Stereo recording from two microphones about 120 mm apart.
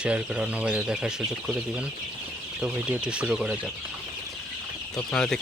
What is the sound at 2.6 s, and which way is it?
Speech, 10° right (ahead or behind).